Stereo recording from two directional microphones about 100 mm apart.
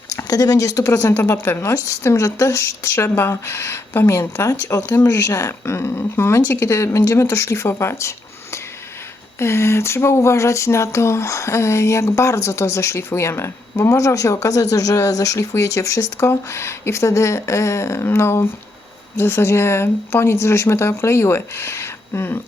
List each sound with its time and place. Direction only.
0.2 s speech: 40° left (ahead or behind)